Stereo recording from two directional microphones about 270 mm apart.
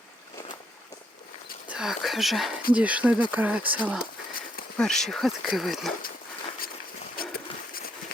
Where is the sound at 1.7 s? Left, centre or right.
Centre.